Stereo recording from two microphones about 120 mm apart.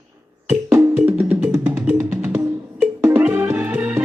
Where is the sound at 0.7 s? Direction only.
15° right (ahead or behind).